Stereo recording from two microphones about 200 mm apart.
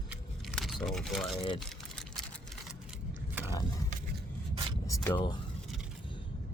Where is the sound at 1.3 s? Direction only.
25° left (ahead or behind).